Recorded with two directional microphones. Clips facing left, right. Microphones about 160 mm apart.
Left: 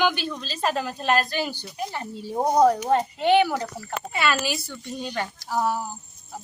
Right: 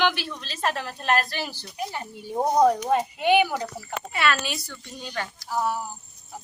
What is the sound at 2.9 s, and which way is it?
Speech, 10° right (ahead or behind).